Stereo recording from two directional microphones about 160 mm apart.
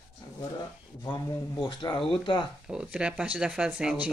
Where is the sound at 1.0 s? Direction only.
25° left (ahead or behind).